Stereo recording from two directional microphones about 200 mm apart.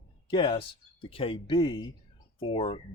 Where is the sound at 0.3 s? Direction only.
25° left (ahead or behind).